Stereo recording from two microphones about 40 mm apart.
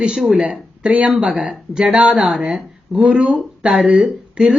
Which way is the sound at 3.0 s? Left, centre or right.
Right.